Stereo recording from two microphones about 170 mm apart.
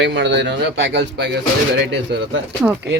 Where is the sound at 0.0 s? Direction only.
90° right.